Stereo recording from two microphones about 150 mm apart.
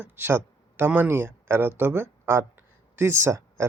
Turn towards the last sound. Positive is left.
turn(degrees=-20)  # may be behind; listen again after turning